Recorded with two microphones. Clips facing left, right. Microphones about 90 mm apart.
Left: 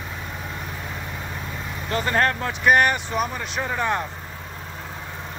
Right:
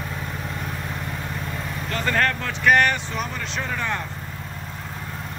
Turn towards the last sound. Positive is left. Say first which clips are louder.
# left 3 dB
turn(degrees=20)  # may be behind; listen again after turning